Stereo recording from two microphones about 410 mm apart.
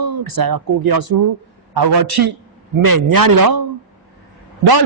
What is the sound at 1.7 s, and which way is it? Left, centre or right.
A man's voice, right.